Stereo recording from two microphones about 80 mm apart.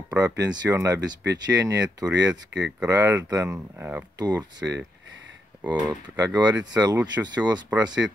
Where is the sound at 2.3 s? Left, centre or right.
Centre.